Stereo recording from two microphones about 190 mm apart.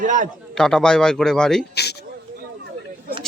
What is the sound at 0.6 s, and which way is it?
Speech, 5° left (ahead or behind).